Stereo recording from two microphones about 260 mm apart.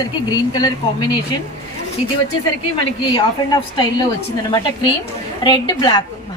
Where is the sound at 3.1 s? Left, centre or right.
Centre.